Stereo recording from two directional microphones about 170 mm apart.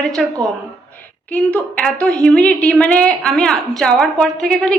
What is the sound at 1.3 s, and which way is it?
A woman's voice, 5° left (ahead or behind).